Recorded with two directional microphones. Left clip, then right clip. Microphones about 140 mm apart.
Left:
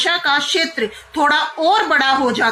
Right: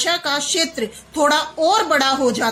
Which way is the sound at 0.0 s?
45° right (ahead or behind).